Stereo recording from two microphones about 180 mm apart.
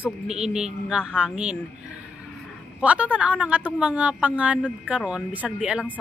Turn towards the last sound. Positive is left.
turn(degrees=-5)  # may be behind; listen again after turning